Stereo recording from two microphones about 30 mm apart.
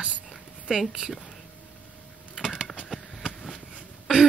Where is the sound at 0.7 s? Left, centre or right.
Right.